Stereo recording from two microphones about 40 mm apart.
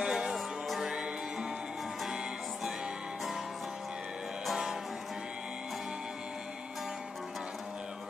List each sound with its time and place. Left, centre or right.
0.0 s music: centre